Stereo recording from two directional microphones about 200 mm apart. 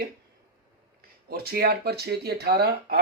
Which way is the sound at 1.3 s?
50° right (ahead or behind).